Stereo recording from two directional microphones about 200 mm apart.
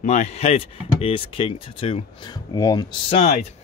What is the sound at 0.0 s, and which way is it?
Speech, 35° left (ahead or behind).